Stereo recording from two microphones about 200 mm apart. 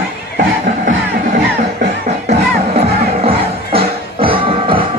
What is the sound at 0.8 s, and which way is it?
Music, 45° right (ahead or behind).